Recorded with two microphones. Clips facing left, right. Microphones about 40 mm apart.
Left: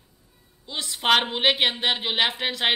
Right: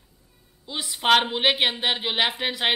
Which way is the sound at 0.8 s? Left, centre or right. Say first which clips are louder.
Right 1 dB; centre.